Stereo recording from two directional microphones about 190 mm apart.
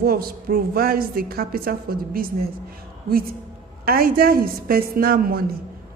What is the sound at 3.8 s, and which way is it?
A woman's voice, 50° right (ahead or behind).